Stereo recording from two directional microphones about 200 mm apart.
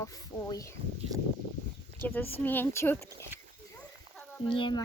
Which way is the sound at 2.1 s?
10° left (ahead or behind).